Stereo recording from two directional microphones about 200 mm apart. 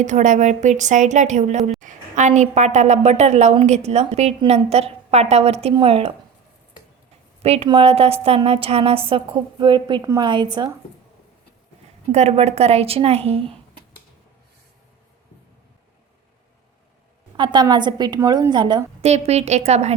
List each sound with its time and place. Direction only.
0.0 s a woman's voice: 40° right (ahead or behind)
7.4 s a woman's voice: 30° right (ahead or behind)
12.1 s a woman's voice: 30° right (ahead or behind)
17.3 s a woman's voice: 20° right (ahead or behind)